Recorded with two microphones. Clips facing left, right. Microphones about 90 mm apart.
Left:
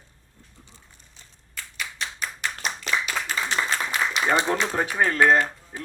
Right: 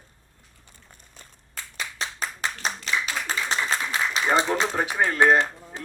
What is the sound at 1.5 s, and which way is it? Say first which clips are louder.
Clapping: even; 30° right (ahead or behind).